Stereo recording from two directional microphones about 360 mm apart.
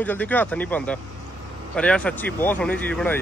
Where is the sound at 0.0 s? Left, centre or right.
Centre.